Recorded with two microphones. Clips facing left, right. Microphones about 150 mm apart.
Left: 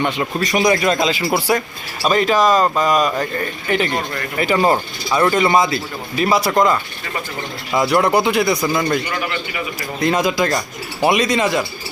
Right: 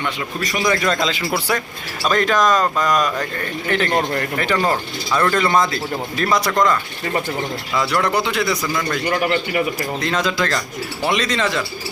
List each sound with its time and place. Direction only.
0.4 s speech: 20° left (ahead or behind); by 3.1 s 5° left (ahead or behind)
4.4 s speech: 10° left (ahead or behind)
6.5 s speech: 25° left (ahead or behind)
7.8 s speech: 15° left (ahead or behind)
9.0 s a man's voice: 45° right (ahead or behind)
10.0 s speech: 10° left (ahead or behind)